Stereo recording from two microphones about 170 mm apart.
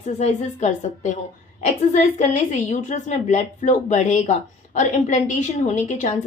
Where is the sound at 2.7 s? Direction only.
45° left (ahead or behind).